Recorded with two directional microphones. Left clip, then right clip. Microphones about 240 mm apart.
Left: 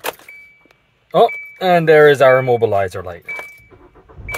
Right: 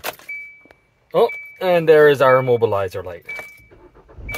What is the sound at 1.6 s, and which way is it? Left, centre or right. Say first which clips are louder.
Speech: left 2 dB; centre.